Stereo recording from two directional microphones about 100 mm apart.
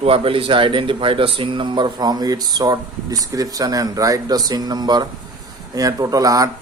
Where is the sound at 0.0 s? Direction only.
65° right (ahead or behind).